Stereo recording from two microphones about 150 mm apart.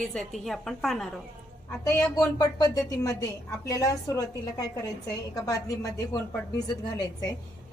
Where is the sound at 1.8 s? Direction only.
25° left (ahead or behind).